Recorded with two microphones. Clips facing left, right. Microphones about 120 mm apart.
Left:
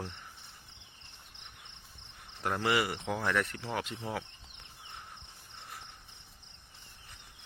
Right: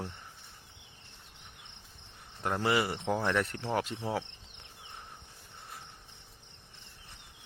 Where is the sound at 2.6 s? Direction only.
30° right (ahead or behind).